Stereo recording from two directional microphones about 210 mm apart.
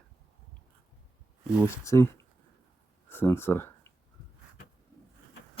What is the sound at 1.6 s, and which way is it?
Speech, 10° left (ahead or behind).